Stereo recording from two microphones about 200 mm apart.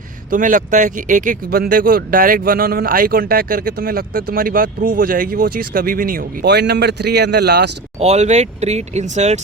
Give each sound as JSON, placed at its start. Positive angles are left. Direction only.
{"t": 0.3, "sound": "speech", "side_deg": -40}
{"t": 7.9, "sound": "speech", "side_deg": -30}